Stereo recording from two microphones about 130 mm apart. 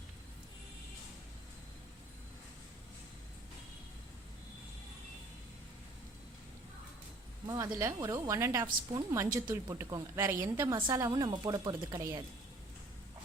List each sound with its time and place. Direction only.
7.4 s a woman's voice: 30° right (ahead or behind)